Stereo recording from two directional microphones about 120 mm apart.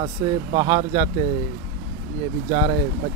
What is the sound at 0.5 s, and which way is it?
Speech, 40° right (ahead or behind).